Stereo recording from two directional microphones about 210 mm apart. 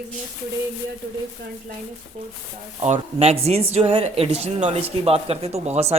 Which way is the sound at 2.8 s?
30° right (ahead or behind).